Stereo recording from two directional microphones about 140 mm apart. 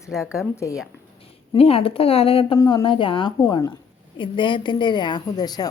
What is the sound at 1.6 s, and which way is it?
Speech, 45° left (ahead or behind).